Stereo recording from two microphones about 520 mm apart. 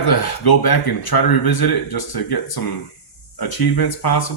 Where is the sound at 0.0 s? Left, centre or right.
Left.